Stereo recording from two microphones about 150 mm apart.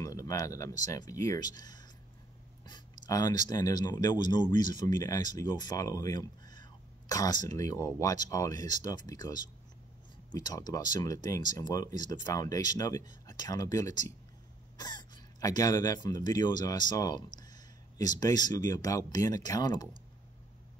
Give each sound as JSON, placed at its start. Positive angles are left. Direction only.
{"t": 0.0, "sound": "speech", "side_deg": 20}
{"t": 2.6, "sound": "a sound", "side_deg": 25}
{"t": 3.4, "sound": "speech", "side_deg": 25}